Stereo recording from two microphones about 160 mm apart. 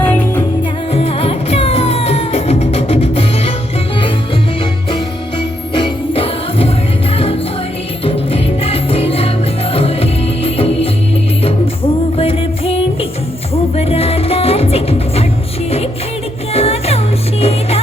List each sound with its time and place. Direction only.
0.0 s music: 10° left (ahead or behind)
0.9 s music: 40° left (ahead or behind)
4.6 s music: 35° left (ahead or behind)
12.1 s music: 35° left (ahead or behind)
16.5 s music: 40° left (ahead or behind)